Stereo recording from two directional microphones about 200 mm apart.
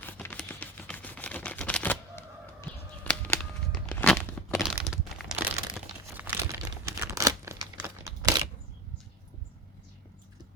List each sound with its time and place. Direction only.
0.0 s a sound: 10° left (ahead or behind)
4.5 s crumpling: centre (ahead or behind)
6.6 s crumpling: 15° right (ahead or behind)